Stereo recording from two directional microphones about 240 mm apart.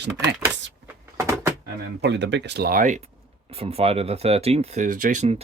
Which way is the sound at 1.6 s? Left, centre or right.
Right.